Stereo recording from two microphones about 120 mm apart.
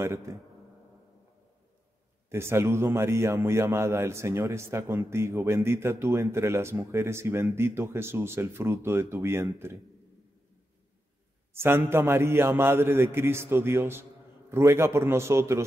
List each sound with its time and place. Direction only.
0.3 s a man's voice: 25° right (ahead or behind)
2.2 s a man's voice: 20° right (ahead or behind)
11.5 s a man's voice: 20° right (ahead or behind)